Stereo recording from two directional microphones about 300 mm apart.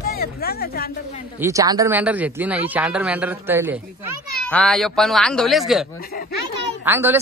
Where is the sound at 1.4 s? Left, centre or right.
Centre.